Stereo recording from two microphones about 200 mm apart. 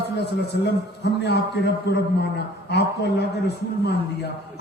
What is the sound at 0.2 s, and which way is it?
A man's voice, 60° left (ahead or behind).